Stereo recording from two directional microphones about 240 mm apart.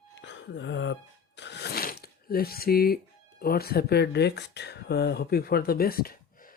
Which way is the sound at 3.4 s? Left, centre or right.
Left.